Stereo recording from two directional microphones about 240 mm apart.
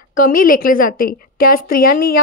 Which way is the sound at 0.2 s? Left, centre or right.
Left.